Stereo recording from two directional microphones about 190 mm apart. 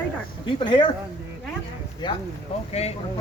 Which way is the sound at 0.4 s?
25° left (ahead or behind).